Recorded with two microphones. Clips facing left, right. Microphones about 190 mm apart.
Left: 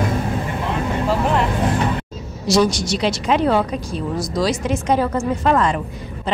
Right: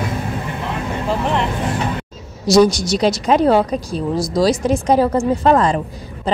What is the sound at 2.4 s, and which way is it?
Speech, 40° right (ahead or behind).